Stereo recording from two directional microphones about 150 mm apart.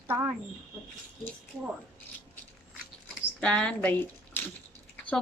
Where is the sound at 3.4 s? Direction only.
10° left (ahead or behind).